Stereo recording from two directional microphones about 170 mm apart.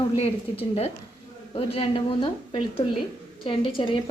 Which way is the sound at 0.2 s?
35° left (ahead or behind).